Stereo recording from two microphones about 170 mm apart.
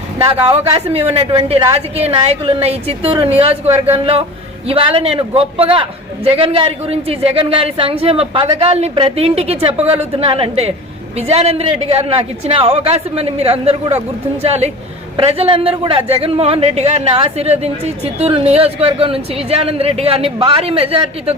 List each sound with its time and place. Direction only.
0.5 s a man's voice: 35° right (ahead or behind)